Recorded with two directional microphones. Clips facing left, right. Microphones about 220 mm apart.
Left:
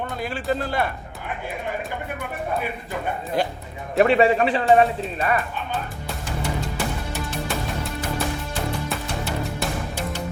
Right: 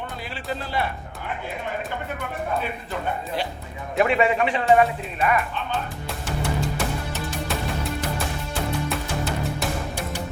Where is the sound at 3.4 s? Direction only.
45° left (ahead or behind).